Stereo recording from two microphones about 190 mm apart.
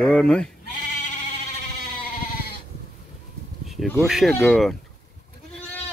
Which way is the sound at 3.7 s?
Centre (ahead or behind).